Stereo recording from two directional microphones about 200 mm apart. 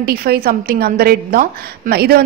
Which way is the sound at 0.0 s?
50° right (ahead or behind).